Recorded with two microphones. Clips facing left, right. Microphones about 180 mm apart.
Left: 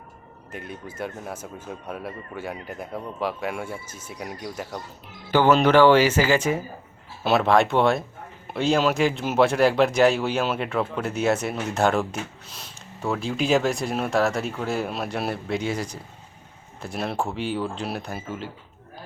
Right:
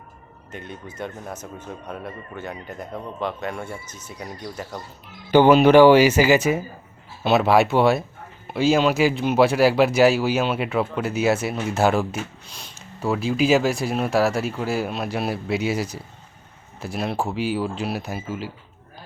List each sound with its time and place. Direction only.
0.5 s speech: 5° left (ahead or behind)
5.3 s speech: 15° right (ahead or behind)